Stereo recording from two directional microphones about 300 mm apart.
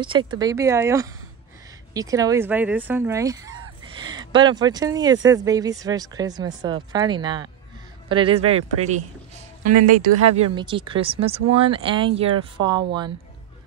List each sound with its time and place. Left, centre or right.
0.0 s speech: centre
9.8 s speech: right
10.3 s speech: centre